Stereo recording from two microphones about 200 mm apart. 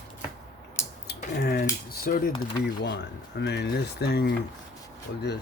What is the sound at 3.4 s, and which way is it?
Speech, 55° left (ahead or behind).